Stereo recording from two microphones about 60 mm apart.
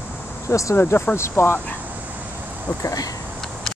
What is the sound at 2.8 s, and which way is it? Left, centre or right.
Speech, left.